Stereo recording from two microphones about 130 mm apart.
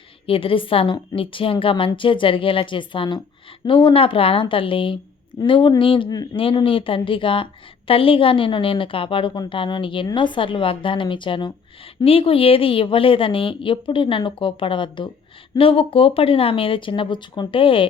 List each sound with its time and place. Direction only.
0.3 s a woman's voice: 45° left (ahead or behind)